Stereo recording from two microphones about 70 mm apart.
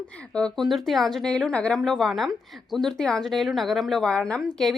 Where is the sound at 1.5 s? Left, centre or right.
Centre.